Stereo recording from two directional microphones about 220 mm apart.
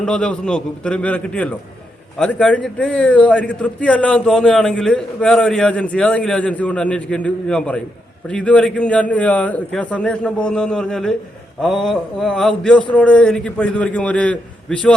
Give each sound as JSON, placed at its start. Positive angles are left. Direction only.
{"t": 0.0, "sound": "a man's voice", "side_deg": 5}